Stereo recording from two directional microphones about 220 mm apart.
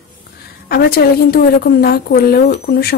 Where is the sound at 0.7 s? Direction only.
45° left (ahead or behind).